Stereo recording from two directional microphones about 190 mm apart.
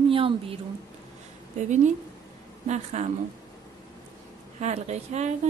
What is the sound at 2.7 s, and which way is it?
Speech, 35° right (ahead or behind).